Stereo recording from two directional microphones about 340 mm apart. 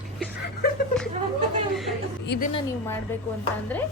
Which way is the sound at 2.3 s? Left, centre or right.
Left.